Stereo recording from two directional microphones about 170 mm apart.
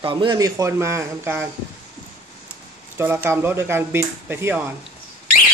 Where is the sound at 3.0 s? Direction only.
15° right (ahead or behind).